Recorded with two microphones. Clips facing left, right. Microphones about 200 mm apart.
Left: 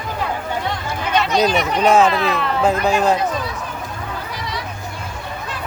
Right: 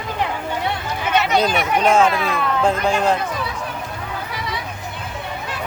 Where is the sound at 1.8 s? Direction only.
5° left (ahead or behind).